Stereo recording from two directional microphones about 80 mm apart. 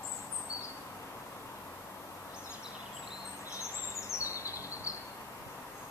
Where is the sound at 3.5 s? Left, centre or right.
Left.